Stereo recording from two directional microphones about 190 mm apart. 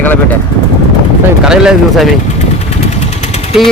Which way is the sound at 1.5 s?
5° right (ahead or behind).